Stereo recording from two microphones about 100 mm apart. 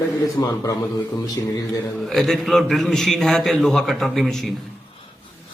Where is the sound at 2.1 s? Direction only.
5° left (ahead or behind).